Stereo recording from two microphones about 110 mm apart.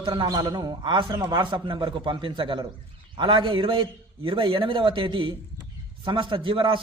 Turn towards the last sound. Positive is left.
turn(degrees=-50)  # may be behind; listen again after turning